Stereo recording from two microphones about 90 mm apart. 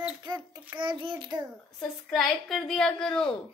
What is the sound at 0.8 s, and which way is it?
Speech, 70° right (ahead or behind).